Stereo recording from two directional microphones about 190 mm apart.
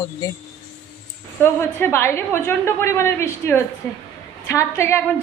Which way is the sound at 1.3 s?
10° left (ahead or behind).